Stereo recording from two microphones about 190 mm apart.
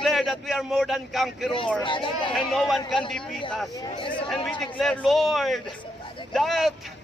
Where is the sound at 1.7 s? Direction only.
25° left (ahead or behind).